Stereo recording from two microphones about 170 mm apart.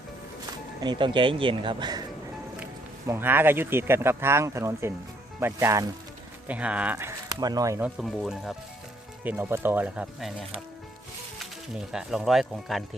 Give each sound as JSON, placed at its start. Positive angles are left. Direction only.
{"t": 0.8, "sound": "speech", "side_deg": -30}
{"t": 3.1, "sound": "speech", "side_deg": -10}
{"t": 6.5, "sound": "speech", "side_deg": -5}
{"t": 7.8, "sound": "speech", "side_deg": -5}
{"t": 9.2, "sound": "speech", "side_deg": -10}
{"t": 11.7, "sound": "speech", "side_deg": -5}